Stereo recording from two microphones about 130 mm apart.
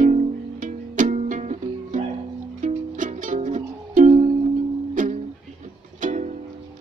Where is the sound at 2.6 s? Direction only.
80° right; by 4.2 s 65° right (ahead or behind).